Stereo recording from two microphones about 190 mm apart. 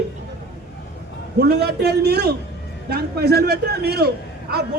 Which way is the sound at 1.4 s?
60° right (ahead or behind).